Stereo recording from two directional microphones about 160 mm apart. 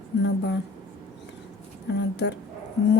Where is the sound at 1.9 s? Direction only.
90° left.